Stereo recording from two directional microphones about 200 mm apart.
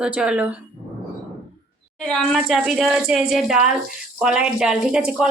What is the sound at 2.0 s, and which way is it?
A woman's voice, 5° left (ahead or behind).